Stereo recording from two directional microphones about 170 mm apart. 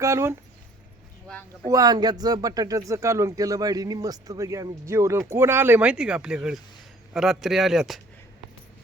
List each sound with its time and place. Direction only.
0.0 s speech: 15° right (ahead or behind)
1.6 s speech: 20° right (ahead or behind); by 8.0 s centre (ahead or behind)